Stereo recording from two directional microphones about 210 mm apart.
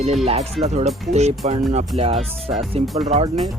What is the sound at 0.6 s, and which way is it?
Speech, 30° right (ahead or behind).